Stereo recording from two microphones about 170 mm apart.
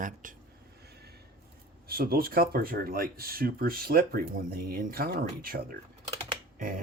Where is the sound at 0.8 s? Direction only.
70° right (ahead or behind).